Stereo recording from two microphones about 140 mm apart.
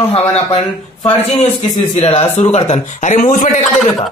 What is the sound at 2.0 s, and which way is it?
Speech, 40° left (ahead or behind).